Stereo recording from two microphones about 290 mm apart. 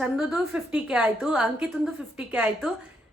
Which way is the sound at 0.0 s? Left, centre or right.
Centre.